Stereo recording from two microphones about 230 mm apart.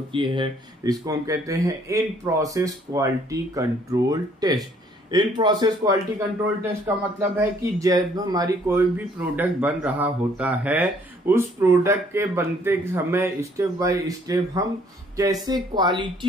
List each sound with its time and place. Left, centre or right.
0.1 s speech: right